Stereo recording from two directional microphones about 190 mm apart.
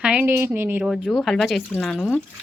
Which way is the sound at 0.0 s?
5° right (ahead or behind).